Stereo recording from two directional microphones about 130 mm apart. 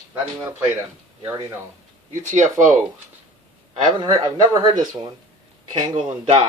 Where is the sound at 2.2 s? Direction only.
70° right (ahead or behind).